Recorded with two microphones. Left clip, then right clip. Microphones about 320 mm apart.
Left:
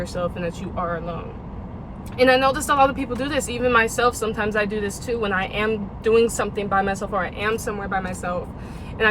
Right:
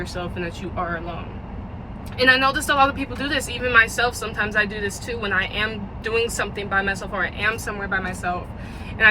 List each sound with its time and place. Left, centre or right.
0.2 s speech: centre
2.1 s speech: centre